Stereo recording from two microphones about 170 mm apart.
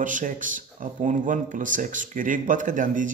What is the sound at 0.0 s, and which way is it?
Speech, 50° right (ahead or behind).